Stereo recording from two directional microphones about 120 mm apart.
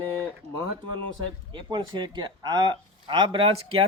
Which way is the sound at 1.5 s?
40° right (ahead or behind).